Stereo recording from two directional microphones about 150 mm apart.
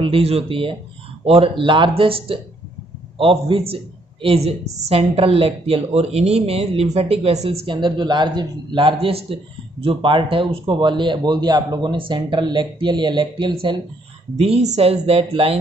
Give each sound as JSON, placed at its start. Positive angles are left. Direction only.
{"t": 0.0, "sound": "speech", "side_deg": -40}
{"t": 14.3, "sound": "speech", "side_deg": -45}